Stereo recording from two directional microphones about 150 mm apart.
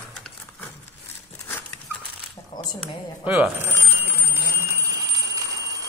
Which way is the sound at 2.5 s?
50° left (ahead or behind).